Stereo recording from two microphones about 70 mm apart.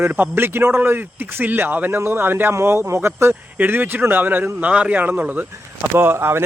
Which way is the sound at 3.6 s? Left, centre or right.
Right.